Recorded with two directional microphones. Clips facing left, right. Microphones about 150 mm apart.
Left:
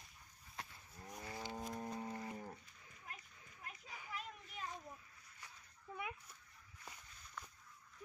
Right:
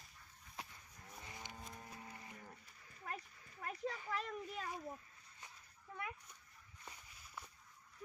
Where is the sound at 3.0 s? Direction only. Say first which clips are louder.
Right 9 dB; 45° right (ahead or behind).